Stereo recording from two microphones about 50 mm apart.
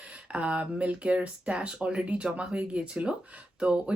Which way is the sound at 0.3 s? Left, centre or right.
Right.